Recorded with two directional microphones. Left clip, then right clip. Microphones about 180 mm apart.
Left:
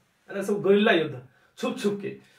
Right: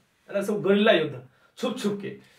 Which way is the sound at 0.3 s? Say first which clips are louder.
Left 1 dB; 10° right (ahead or behind).